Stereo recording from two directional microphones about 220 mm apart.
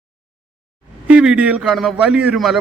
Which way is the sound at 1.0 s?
5° right (ahead or behind).